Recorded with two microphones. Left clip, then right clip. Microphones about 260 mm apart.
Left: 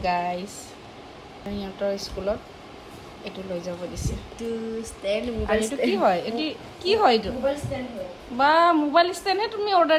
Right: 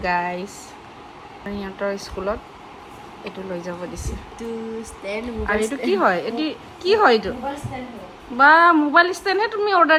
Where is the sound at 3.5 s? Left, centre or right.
Centre.